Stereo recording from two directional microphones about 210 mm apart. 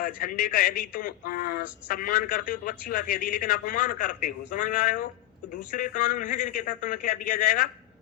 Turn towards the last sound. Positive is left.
turn(degrees=45)  # may be behind; listen again after turning